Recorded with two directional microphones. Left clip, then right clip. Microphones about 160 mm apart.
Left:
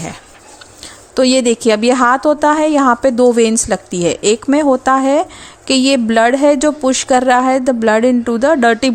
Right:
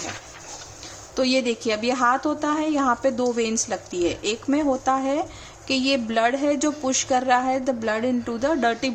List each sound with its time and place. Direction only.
1.1 s a woman's voice: 45° left (ahead or behind)